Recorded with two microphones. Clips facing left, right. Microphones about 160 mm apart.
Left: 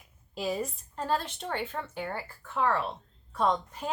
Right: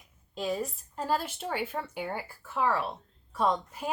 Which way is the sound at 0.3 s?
5° left (ahead or behind).